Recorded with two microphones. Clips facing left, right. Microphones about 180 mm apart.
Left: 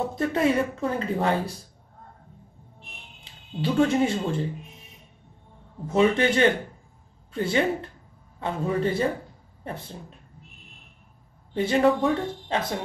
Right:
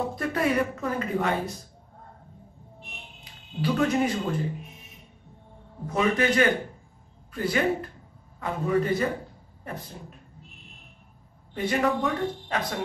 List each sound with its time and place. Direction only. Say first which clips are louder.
0.1 s speech: left 3 dB; 25° left (ahead or behind)
3.3 s music: right 1 dB; 25° left (ahead or behind)
3.6 s speech: left 2 dB; 25° left (ahead or behind)
5.9 s speech: left 3 dB; 25° left (ahead or behind)
11.5 s speech: left 4 dB; 25° left (ahead or behind)